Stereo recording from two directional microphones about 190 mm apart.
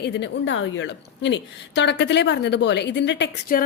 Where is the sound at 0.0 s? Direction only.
70° left (ahead or behind).